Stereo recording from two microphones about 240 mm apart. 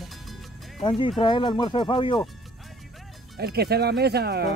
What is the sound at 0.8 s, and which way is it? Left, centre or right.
Speech, left.